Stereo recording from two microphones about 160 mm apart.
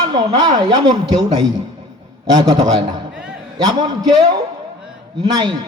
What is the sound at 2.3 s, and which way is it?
A man's voice, 25° right (ahead or behind).